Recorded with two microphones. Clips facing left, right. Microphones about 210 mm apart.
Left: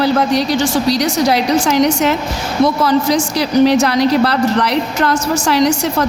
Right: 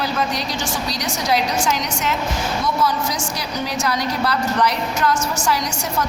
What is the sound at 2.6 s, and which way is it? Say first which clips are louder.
Speech: left 10 dB; 75° left (ahead or behind).